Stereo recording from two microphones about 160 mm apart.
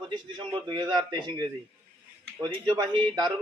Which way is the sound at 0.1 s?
25° right (ahead or behind).